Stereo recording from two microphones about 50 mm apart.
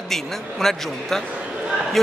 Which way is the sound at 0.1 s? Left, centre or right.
Centre.